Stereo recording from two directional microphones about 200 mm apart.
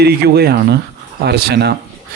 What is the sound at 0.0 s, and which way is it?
Speech, 50° right (ahead or behind).